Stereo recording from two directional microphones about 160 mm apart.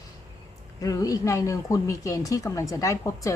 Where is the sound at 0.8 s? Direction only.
20° left (ahead or behind).